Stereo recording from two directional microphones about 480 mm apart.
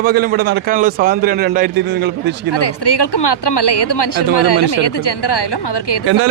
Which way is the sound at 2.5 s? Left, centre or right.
Left.